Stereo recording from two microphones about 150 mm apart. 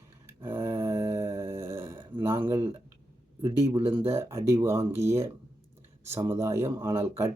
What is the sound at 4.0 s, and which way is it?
A man's voice, 15° right (ahead or behind).